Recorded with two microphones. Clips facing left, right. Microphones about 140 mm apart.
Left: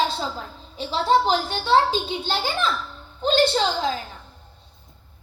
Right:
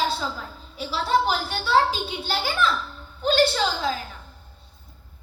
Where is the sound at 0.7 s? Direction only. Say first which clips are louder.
Left 3 dB; 30° left (ahead or behind).